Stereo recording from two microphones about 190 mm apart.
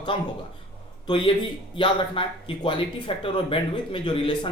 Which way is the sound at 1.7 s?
25° left (ahead or behind).